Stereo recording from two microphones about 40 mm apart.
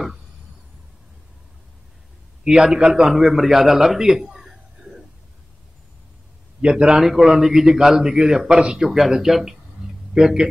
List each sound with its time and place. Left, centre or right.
2.4 s a man's voice: centre
6.6 s a man's voice: centre
7.0 s a man's voice: centre